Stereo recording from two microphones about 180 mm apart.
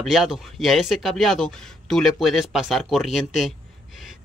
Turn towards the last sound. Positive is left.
turn(degrees=0)  # may be behind; listen again after turning